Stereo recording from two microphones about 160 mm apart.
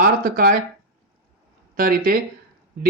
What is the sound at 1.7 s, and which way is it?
Speech, 60° right (ahead or behind).